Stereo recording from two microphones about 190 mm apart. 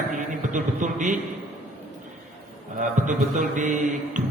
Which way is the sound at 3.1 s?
40° right (ahead or behind).